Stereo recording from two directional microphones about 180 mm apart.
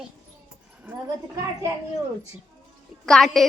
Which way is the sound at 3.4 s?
Centre (ahead or behind).